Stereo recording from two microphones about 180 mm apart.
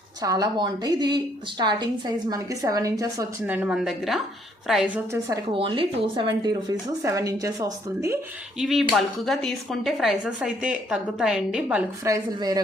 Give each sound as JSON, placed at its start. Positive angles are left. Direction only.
{"t": 0.2, "sound": "a woman's voice", "side_deg": -20}
{"t": 5.5, "sound": "a woman's voice", "side_deg": -30}
{"t": 8.5, "sound": "speech", "side_deg": 0}
{"t": 12.0, "sound": "a woman's voice", "side_deg": -20}